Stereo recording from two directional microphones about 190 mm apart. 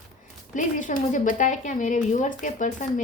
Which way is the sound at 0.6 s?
45° left (ahead or behind).